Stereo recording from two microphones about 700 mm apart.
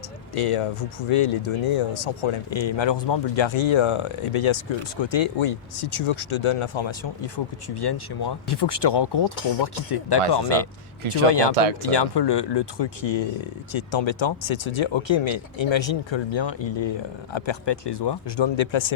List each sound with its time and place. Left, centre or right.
0.3 s speech: left
0.8 s speech: left
9.3 s speech: left
11.3 s speech: left
11.5 s speech: right
11.9 s speech: left